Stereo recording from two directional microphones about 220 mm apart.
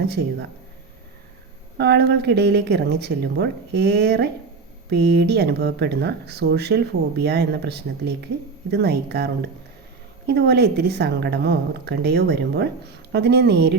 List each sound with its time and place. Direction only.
0.0 s a woman's voice: 50° right (ahead or behind)
1.8 s a woman's voice: 50° right (ahead or behind)